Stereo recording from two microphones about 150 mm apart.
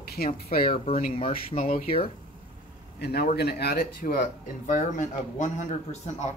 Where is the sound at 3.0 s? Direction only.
90° left; by 6.3 s 50° left (ahead or behind).